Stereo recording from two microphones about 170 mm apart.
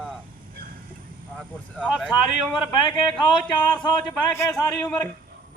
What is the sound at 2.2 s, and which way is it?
Speech, 30° left (ahead or behind).